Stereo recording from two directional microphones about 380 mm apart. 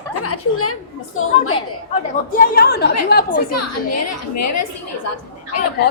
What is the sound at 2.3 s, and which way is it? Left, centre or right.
A woman's voice, left.